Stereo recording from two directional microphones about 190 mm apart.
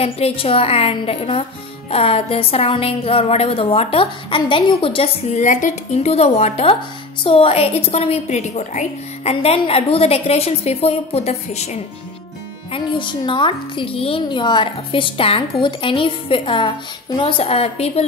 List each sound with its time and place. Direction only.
0.0 s a woman's voice: 30° left (ahead or behind)